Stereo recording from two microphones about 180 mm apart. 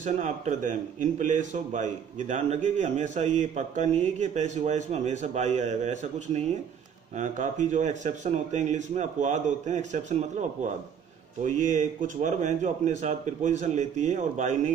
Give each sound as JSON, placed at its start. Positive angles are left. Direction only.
{"t": 0.0, "sound": "a man's voice", "side_deg": -45}
{"t": 11.4, "sound": "a man's voice", "side_deg": -45}